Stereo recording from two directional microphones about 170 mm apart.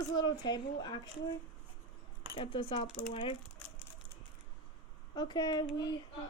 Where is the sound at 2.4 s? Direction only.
30° left (ahead or behind).